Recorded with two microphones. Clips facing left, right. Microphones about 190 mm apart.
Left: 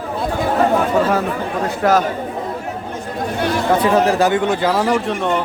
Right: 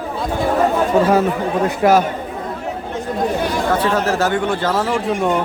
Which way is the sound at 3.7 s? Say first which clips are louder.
Left 5 dB; 15° left (ahead or behind).